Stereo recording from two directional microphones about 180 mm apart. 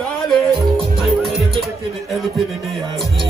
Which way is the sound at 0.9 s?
Centre (ahead or behind).